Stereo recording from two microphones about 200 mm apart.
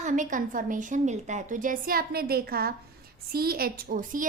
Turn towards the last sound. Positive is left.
turn(degrees=-40)  # may be behind; listen again after turning